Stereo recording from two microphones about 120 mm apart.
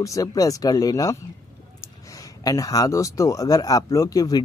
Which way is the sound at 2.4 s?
30° left (ahead or behind).